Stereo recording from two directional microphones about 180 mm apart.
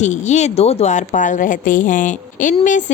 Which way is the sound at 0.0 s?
40° left (ahead or behind).